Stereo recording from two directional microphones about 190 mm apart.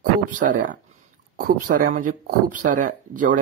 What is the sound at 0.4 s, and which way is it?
Speech, 45° right (ahead or behind).